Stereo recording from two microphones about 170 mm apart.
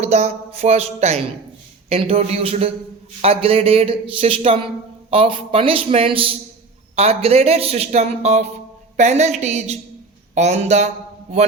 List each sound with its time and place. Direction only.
0.0 s a man's voice: 40° right (ahead or behind)